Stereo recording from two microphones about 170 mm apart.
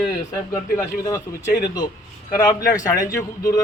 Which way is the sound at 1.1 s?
20° left (ahead or behind).